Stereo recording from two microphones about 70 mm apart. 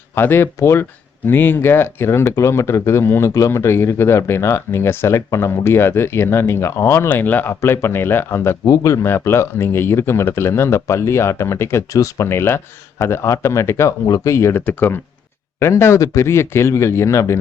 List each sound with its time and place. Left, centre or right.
0.2 s speech: left
7.1 s speech: left
8.6 s speech: left
11.9 s speech: left
12.3 s speech: left
14.7 s speech: left
15.5 s speech: left